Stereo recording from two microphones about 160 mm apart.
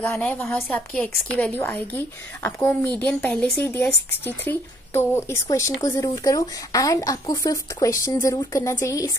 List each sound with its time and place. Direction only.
0.0 s speech: 10° left (ahead or behind)